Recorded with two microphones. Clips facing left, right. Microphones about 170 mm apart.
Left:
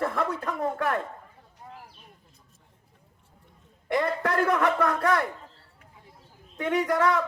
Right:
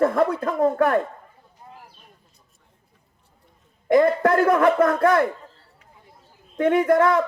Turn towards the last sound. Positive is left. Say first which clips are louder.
# right 6 dB
turn(degrees=-45)  # may be behind; listen again after turning